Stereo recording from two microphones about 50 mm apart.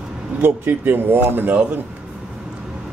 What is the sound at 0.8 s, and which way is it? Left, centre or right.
Speech, right.